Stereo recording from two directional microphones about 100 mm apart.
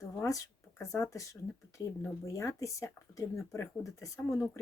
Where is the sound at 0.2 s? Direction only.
35° left (ahead or behind).